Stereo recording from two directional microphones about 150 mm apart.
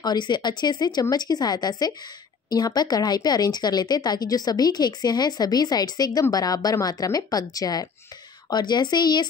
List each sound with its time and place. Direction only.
0.0 s speech: 30° left (ahead or behind)